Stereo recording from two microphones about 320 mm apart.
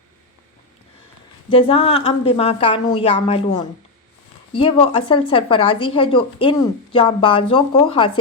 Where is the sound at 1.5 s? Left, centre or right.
Centre.